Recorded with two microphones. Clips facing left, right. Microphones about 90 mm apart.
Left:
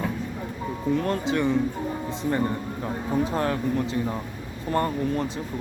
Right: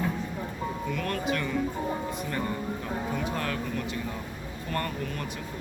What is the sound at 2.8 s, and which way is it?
Speech, 30° left (ahead or behind).